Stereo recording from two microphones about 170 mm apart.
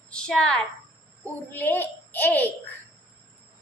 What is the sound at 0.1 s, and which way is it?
A woman's voice, 5° left (ahead or behind).